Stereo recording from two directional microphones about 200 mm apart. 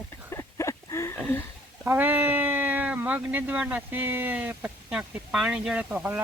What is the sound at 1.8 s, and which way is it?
Speech, 10° right (ahead or behind).